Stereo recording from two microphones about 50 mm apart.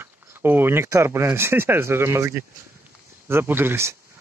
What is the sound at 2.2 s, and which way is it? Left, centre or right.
Speech, right.